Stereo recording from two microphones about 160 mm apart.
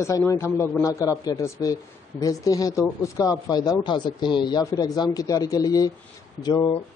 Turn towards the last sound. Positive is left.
turn(degrees=25)  # may be behind; listen again after turning